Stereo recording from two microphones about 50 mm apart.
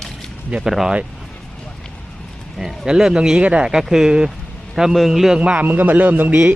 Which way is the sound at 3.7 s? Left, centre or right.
Centre.